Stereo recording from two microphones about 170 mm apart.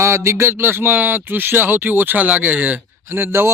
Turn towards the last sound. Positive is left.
turn(degrees=-15)  # may be behind; listen again after turning